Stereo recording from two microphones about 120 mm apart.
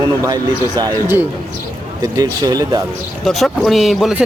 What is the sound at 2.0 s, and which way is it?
Speech, 30° right (ahead or behind).